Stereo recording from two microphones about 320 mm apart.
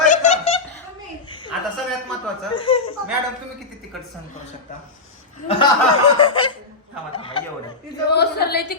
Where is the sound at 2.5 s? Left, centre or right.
Centre.